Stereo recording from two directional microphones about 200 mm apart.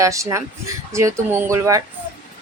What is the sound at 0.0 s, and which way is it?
A woman's voice, 15° right (ahead or behind).